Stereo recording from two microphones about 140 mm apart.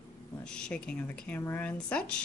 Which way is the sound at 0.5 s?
5° left (ahead or behind).